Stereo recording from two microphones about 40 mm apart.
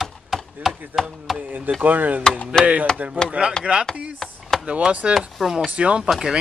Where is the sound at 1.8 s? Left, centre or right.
Right.